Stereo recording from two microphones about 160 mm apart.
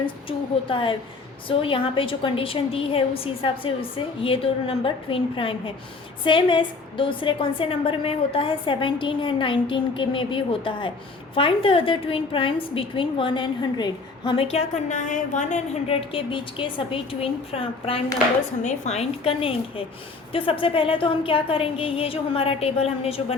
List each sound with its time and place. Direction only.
0.0 s a woman's voice: 30° left (ahead or behind)